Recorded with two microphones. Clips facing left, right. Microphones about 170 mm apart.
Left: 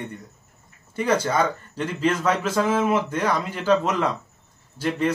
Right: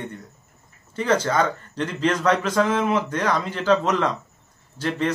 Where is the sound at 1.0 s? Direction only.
10° left (ahead or behind).